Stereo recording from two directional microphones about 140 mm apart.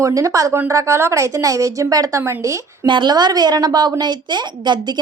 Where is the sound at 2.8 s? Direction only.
35° right (ahead or behind).